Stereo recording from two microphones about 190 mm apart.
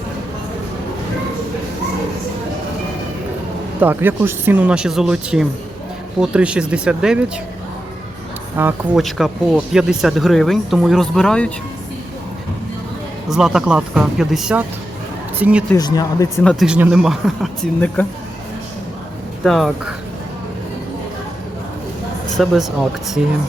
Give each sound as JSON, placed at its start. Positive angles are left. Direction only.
{"t": 3.8, "sound": "speech", "side_deg": -10}
{"t": 8.5, "sound": "speech", "side_deg": -10}
{"t": 9.0, "sound": "speech", "side_deg": 0}
{"t": 13.2, "sound": "speech", "side_deg": -5}
{"t": 15.7, "sound": "speech", "side_deg": 20}
{"t": 16.4, "sound": "speech", "side_deg": 5}
{"t": 16.6, "sound": "speech", "side_deg": -5}
{"t": 19.5, "sound": "speech", "side_deg": 0}
{"t": 22.4, "sound": "speech", "side_deg": 0}